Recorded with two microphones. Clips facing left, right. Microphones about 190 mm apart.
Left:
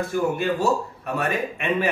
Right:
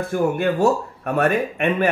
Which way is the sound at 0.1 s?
55° right (ahead or behind).